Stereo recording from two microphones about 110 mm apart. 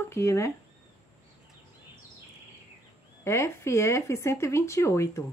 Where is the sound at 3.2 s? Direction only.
25° left (ahead or behind).